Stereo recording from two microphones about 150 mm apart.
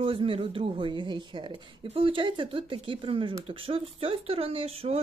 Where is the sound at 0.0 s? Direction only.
35° right (ahead or behind).